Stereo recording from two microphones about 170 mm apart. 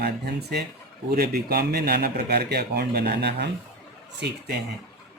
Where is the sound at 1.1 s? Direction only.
65° right (ahead or behind).